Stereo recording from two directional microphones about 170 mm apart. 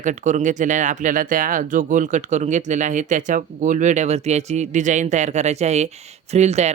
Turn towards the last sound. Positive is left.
turn(degrees=-40)  # may be behind; listen again after turning